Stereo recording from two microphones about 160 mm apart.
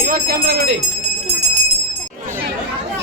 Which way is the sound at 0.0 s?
70° right (ahead or behind).